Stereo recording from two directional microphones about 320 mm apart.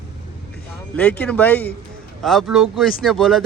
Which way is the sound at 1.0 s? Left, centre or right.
Centre.